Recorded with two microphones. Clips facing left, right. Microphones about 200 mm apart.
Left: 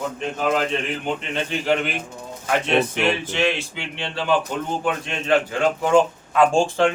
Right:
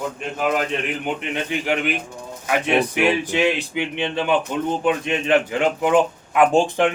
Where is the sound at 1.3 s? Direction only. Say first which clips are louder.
Left 2 dB; 15° right (ahead or behind).